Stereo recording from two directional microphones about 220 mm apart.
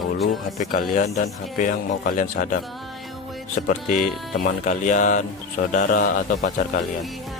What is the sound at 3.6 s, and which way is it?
Speech, 35° left (ahead or behind).